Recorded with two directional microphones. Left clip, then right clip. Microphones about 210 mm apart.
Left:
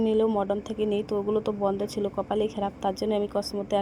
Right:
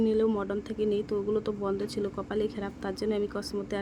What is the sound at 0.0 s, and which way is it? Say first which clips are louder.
A woman's voice: left 3 dB; centre (ahead or behind).